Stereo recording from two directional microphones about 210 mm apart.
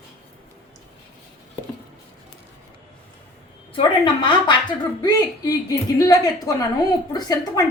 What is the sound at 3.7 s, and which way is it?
A woman's voice, 25° left (ahead or behind).